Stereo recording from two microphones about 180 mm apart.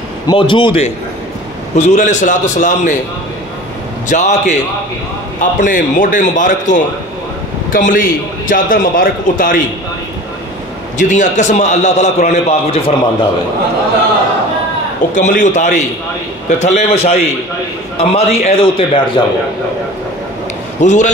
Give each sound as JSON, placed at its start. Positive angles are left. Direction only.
{"t": 0.3, "sound": "a man's voice", "side_deg": 25}
{"t": 4.1, "sound": "a man's voice", "side_deg": 40}
{"t": 11.0, "sound": "a man's voice", "side_deg": 45}
{"t": 15.1, "sound": "a man's voice", "side_deg": 45}
{"t": 20.8, "sound": "a man's voice", "side_deg": 40}